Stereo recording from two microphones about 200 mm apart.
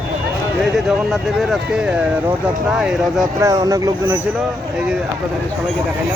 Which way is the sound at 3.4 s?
15° right (ahead or behind).